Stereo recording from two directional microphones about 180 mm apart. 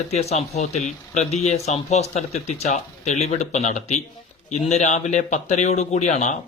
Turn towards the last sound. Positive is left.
turn(degrees=40)  # may be behind; listen again after turning